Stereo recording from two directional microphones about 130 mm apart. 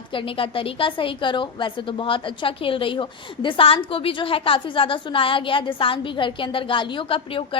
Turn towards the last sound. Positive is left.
turn(degrees=40)  # may be behind; listen again after turning